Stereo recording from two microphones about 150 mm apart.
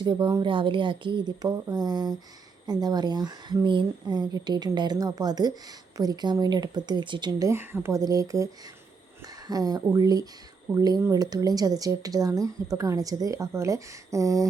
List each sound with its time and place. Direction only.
0.0 s speech: 30° right (ahead or behind)